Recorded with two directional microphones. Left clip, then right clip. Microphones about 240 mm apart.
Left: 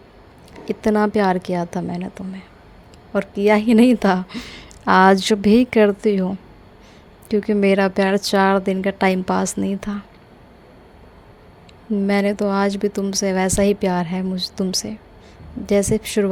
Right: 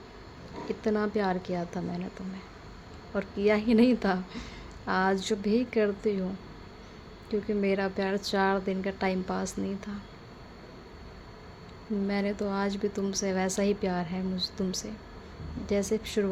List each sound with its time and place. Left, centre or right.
0.7 s a woman's voice: left
12.0 s a woman's voice: left